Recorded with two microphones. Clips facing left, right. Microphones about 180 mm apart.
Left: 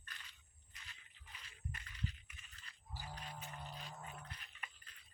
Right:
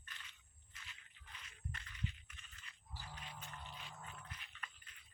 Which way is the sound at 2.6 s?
35° left (ahead or behind).